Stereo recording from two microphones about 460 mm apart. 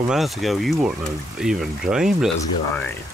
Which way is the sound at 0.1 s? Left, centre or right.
Centre.